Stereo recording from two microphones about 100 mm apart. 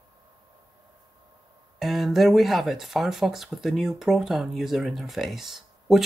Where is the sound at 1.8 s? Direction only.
Centre (ahead or behind).